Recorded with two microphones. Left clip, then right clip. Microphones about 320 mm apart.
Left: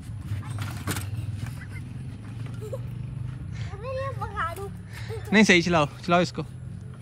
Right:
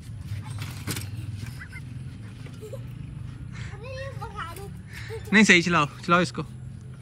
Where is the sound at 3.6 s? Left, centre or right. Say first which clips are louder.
Left 6 dB; centre.